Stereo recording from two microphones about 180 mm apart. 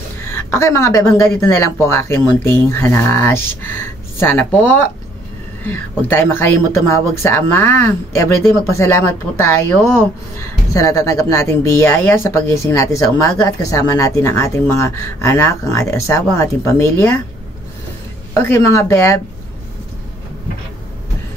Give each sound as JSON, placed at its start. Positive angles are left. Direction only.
{"t": 0.2, "sound": "speech", "side_deg": 15}
{"t": 5.7, "sound": "speech", "side_deg": 10}
{"t": 18.3, "sound": "speech", "side_deg": 15}